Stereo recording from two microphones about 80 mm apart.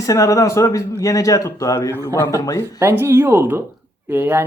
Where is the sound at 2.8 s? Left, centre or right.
Right.